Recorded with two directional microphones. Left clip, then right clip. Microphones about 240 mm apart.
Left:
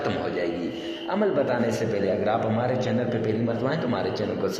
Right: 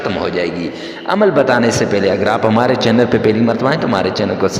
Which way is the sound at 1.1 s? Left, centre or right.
Right.